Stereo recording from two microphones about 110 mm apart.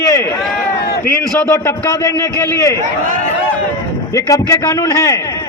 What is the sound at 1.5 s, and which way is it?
A man's voice, 25° left (ahead or behind).